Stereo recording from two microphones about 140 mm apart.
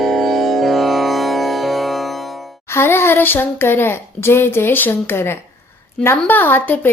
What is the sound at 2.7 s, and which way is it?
Speech, 20° left (ahead or behind).